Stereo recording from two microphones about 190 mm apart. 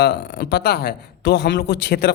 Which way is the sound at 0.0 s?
65° left (ahead or behind).